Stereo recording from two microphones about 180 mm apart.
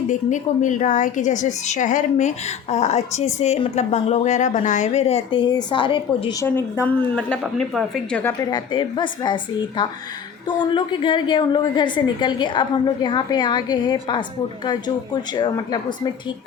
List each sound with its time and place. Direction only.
0.1 s a woman's voice: 45° left (ahead or behind); by 6.3 s 30° left (ahead or behind)
6.4 s a woman's voice: 15° left (ahead or behind)
8.2 s a woman's voice: 20° left (ahead or behind)